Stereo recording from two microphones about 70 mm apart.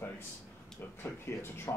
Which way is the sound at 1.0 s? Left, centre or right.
Left.